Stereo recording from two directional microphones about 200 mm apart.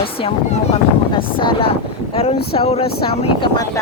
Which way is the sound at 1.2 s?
25° left (ahead or behind).